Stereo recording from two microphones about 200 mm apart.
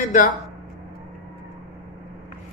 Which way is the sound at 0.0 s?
40° left (ahead or behind).